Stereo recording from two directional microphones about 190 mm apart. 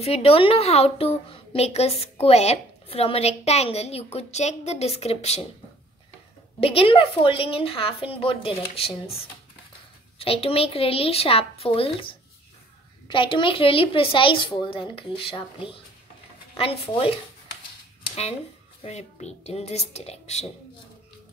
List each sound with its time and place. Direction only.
0.0 s a woman's voice: 30° left (ahead or behind)
6.6 s a woman's voice: 30° left (ahead or behind)
13.1 s a woman's voice: 25° left (ahead or behind)
18.8 s a woman's voice: 35° left (ahead or behind)